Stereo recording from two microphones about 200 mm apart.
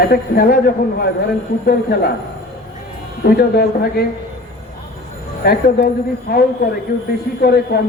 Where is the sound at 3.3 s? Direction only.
50° left (ahead or behind).